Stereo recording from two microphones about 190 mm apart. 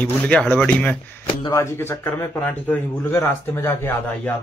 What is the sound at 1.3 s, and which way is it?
A man's voice, 15° left (ahead or behind).